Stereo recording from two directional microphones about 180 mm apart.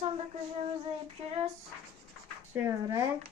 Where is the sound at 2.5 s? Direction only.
10° right (ahead or behind).